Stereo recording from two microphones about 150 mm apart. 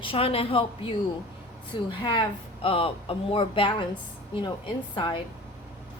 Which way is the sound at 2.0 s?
35° left (ahead or behind).